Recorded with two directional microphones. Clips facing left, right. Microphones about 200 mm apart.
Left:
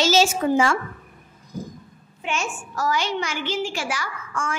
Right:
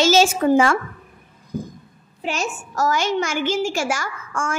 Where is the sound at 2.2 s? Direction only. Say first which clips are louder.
Right 3 dB; 40° right (ahead or behind).